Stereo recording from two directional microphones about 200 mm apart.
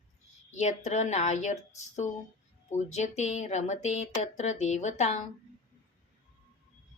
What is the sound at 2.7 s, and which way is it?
A woman's voice, 35° left (ahead or behind).